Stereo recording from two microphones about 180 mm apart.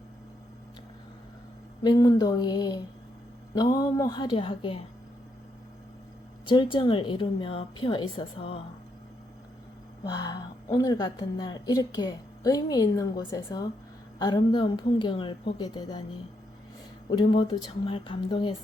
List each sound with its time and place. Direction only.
1.8 s a woman's voice: 20° left (ahead or behind)
6.4 s a woman's voice: 25° left (ahead or behind)
10.0 s a woman's voice: 20° left (ahead or behind)
17.1 s a woman's voice: 25° left (ahead or behind)